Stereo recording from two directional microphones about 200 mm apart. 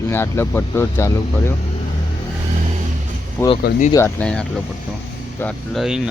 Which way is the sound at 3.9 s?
10° left (ahead or behind).